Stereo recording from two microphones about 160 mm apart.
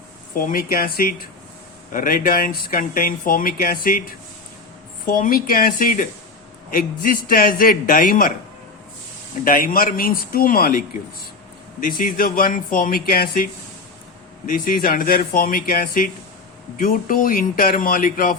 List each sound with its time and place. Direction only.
0.3 s speech: 65° left (ahead or behind)
5.0 s speech: 65° left (ahead or behind)
9.4 s speech: 65° left (ahead or behind)
11.8 s speech: 65° left (ahead or behind)